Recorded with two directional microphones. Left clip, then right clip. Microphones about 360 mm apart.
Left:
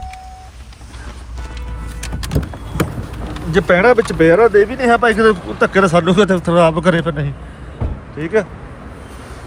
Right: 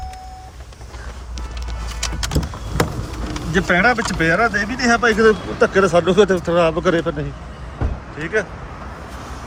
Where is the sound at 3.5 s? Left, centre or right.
Centre.